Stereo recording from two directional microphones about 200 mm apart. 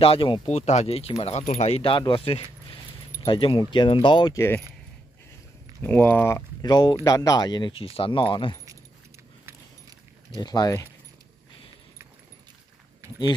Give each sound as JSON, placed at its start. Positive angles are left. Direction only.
{"t": 0.0, "sound": "speech", "side_deg": 25}
{"t": 5.8, "sound": "speech", "side_deg": 10}
{"t": 9.5, "sound": "keys jangling", "side_deg": -20}
{"t": 10.4, "sound": "speech", "side_deg": 20}